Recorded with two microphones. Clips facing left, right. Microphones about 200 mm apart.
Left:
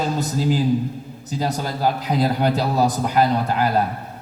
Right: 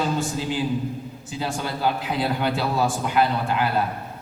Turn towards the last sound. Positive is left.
turn(degrees=40)  # may be behind; listen again after turning